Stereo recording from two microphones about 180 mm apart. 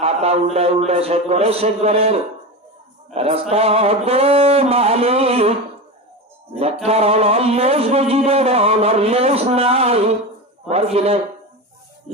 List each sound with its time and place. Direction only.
0.0 s speech: 35° right (ahead or behind)
3.2 s speech: 35° right (ahead or behind)
6.8 s speech: 35° right (ahead or behind)